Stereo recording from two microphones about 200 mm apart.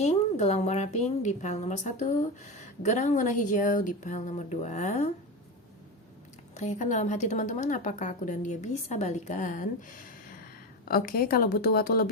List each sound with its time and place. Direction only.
0.0 s a woman's voice: 35° left (ahead or behind)
6.5 s a woman's voice: 35° left (ahead or behind)